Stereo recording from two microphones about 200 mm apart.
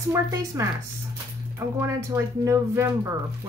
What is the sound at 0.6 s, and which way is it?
A woman's voice, 15° right (ahead or behind).